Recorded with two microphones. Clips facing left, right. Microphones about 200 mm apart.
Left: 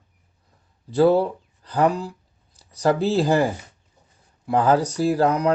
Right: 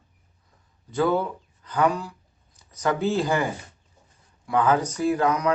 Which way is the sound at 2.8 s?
35° left (ahead or behind).